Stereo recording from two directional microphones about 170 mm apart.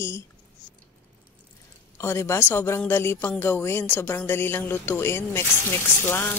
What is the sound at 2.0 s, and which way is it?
Speech, 15° left (ahead or behind).